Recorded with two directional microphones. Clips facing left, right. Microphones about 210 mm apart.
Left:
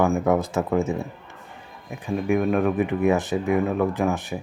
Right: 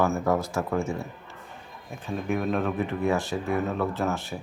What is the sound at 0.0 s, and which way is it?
Speech, 15° left (ahead or behind).